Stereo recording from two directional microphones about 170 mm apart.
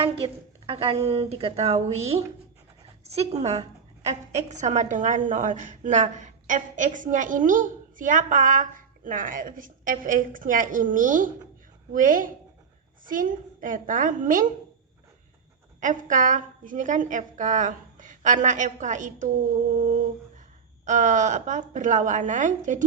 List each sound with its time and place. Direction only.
0.7 s a woman's voice: 30° right (ahead or behind); by 14.4 s 50° right (ahead or behind)
15.8 s a woman's voice: 50° right (ahead or behind)